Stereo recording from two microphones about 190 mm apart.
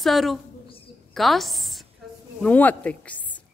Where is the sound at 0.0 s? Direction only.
Centre (ahead or behind).